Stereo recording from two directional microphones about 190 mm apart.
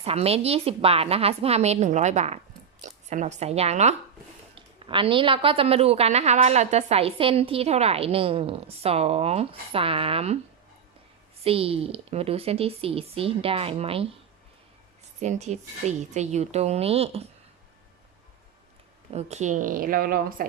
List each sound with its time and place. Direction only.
0.0 s a woman's voice: 30° right (ahead or behind)
11.4 s a woman's voice: 30° right (ahead or behind)
15.2 s a woman's voice: 35° right (ahead or behind)
19.1 s speech: 35° right (ahead or behind)